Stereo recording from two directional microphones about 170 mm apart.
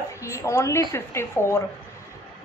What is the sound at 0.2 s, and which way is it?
A woman's voice, 15° left (ahead or behind).